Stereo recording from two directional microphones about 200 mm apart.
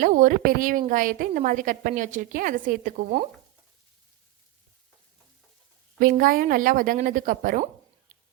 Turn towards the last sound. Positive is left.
turn(degrees=-45)  # may be behind; listen again after turning